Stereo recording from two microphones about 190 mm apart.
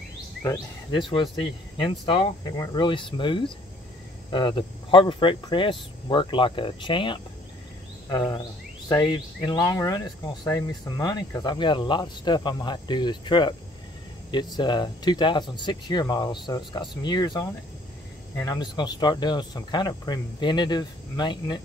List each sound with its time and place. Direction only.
0.4 s cricket: 20° left (ahead or behind)